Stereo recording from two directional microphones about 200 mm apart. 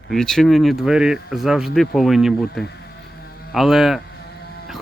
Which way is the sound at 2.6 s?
55° left (ahead or behind).